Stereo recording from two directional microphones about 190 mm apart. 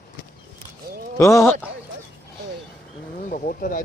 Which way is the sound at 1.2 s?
15° left (ahead or behind).